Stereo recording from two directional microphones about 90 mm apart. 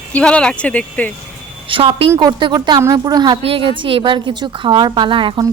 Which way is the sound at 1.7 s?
85° right.